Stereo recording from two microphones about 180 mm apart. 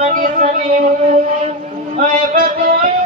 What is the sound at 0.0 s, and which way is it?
Music, 45° right (ahead or behind).